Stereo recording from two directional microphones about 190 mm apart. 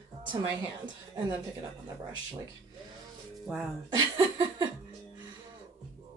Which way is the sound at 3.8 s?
25° right (ahead or behind).